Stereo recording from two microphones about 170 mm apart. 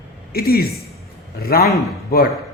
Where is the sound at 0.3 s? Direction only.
65° left (ahead or behind).